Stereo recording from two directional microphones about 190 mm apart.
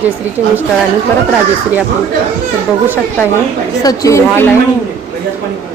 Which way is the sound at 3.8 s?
15° left (ahead or behind).